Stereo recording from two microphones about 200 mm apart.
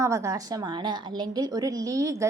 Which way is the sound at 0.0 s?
15° right (ahead or behind).